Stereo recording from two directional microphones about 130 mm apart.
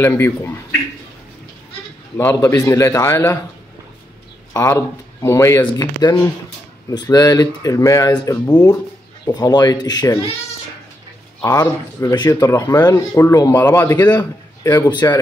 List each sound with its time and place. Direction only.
0.0 s a man's voice: 15° left (ahead or behind)
2.1 s speech: 20° left (ahead or behind)
4.6 s speech: 20° left (ahead or behind)
5.6 s speech: 35° left (ahead or behind)
11.4 s speech: 25° left (ahead or behind)
14.9 s speech: 35° left (ahead or behind)